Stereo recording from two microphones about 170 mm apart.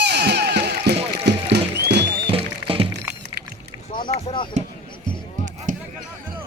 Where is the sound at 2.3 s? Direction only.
35° right (ahead or behind).